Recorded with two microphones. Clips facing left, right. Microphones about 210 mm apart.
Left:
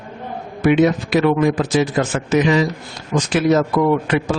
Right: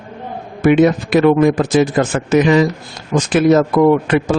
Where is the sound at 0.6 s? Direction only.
50° right (ahead or behind).